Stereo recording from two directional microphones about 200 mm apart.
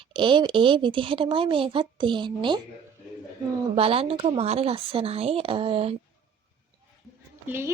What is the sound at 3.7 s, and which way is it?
Speech, 30° right (ahead or behind).